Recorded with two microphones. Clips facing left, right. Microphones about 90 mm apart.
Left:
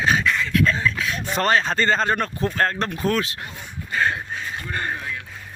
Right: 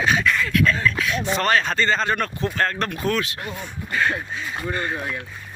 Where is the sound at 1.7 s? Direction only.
40° left (ahead or behind).